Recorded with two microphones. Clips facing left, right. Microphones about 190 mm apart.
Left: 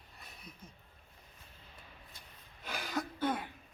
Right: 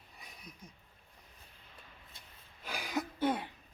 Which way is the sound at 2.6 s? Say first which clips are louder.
Even; 5° right (ahead or behind).